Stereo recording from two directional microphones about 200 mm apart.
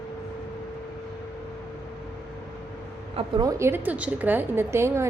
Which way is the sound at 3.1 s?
20° right (ahead or behind).